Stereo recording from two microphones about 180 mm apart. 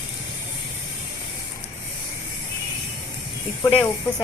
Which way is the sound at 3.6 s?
30° left (ahead or behind).